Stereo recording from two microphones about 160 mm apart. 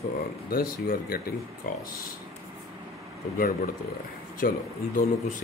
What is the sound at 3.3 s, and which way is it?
Speech, 60° left (ahead or behind).